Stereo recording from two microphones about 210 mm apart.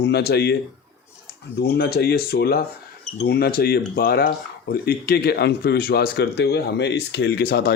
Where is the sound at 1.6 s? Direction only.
50° left (ahead or behind).